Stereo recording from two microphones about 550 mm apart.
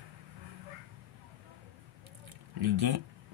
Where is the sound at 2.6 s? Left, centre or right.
Right.